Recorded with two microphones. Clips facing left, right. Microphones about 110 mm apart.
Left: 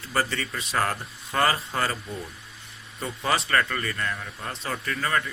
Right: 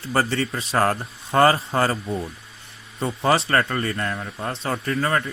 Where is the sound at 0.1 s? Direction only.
30° right (ahead or behind).